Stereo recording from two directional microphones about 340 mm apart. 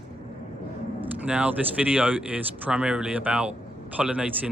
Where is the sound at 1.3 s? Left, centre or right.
Centre.